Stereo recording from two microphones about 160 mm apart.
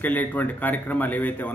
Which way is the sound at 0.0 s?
10° left (ahead or behind).